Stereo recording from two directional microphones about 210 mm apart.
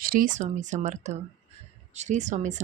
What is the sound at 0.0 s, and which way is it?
A woman's voice, 40° right (ahead or behind).